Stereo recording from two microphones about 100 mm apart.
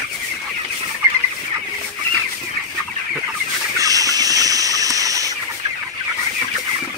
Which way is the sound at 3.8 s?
35° right (ahead or behind).